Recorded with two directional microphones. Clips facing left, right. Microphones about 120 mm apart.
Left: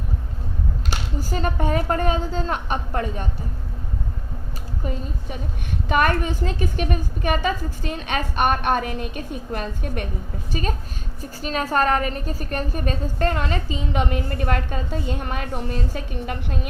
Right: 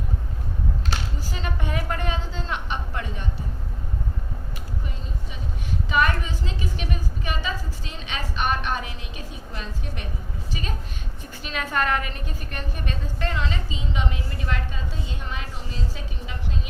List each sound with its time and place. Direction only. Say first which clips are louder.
1.2 s a woman's voice: left 8 dB; 45° left (ahead or behind)
5.9 s a woman's voice: left 3 dB; 50° left (ahead or behind)